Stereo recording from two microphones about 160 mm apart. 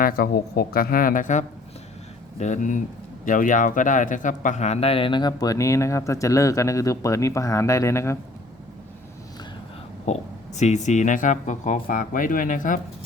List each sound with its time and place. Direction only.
0.0 s a man's voice: 70° left (ahead or behind); by 8.2 s 15° left (ahead or behind)
10.1 s speech: 45° left (ahead or behind)